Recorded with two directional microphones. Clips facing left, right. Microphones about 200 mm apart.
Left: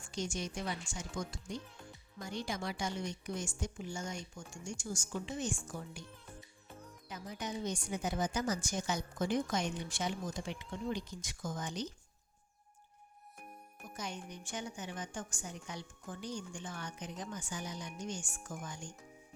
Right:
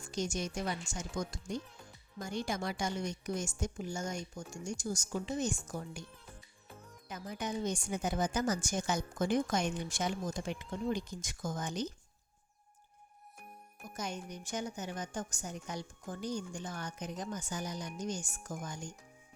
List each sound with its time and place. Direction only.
0.0 s a woman's voice: 40° right (ahead or behind)
7.1 s a woman's voice: 50° right (ahead or behind)
13.9 s a woman's voice: 45° right (ahead or behind)